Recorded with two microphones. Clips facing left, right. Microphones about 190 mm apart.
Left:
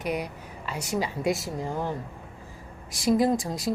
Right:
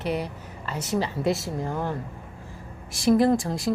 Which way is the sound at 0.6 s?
10° left (ahead or behind).